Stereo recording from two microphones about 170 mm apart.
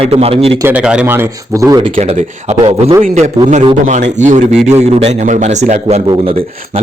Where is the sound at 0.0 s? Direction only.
35° right (ahead or behind).